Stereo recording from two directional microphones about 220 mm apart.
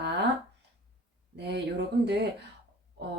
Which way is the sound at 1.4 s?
50° right (ahead or behind).